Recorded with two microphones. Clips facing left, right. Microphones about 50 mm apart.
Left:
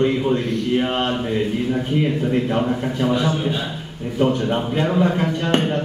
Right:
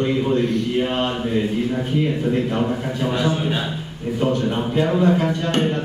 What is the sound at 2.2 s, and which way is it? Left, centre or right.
A man's voice, centre.